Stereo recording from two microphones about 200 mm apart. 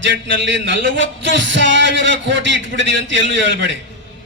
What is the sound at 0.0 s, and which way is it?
Music, 60° right (ahead or behind).